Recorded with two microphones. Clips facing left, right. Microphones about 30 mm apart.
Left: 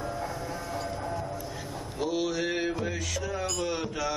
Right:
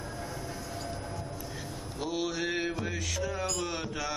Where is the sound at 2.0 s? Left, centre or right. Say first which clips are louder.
Left 4 dB; centre.